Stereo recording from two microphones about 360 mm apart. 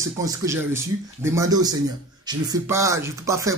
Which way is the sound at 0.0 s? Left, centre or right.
Centre.